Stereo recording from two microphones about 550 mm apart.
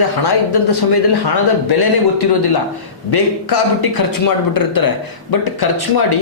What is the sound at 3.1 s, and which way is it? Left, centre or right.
Speech, left.